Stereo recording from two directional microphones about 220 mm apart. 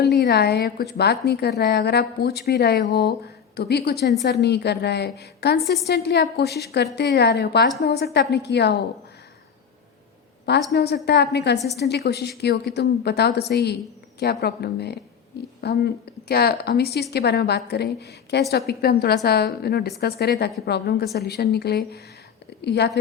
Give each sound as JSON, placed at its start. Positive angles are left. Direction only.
{"t": 0.0, "sound": "a woman's voice", "side_deg": 45}
{"t": 10.7, "sound": "a woman's voice", "side_deg": 50}